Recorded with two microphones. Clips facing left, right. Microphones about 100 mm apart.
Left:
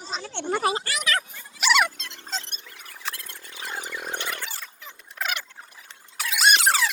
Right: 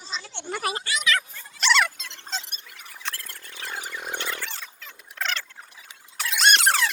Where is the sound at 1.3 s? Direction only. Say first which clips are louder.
Left 3 dB; 10° left (ahead or behind).